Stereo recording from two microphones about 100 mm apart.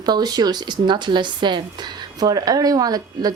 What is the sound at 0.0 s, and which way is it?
Speech, 45° right (ahead or behind).